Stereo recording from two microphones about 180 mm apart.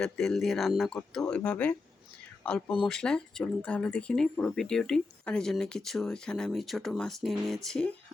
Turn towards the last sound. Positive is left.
turn(degrees=0)  # may be behind; listen again after turning